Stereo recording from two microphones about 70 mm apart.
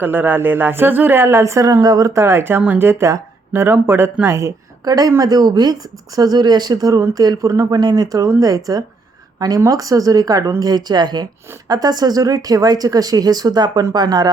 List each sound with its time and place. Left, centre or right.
0.0 s a woman's voice: right
4.9 s speech: right
7.7 s speech: right
10.6 s a woman's voice: right
11.7 s a woman's voice: right